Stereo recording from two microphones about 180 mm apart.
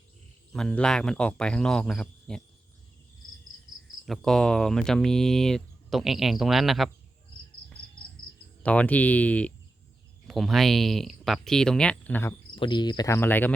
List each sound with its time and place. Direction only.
0.5 s speech: 5° left (ahead or behind)
4.0 s speech: centre (ahead or behind)
8.6 s speech: 5° left (ahead or behind)
12.5 s speech: 25° left (ahead or behind)